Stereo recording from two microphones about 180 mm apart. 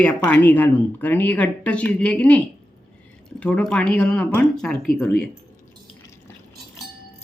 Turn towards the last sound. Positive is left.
turn(degrees=5)  # may be behind; listen again after turning